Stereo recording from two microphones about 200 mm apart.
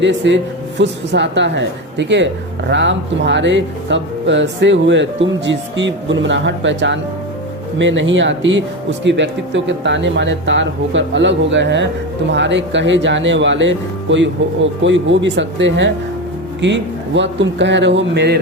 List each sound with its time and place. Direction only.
0.0 s speech: 65° right (ahead or behind)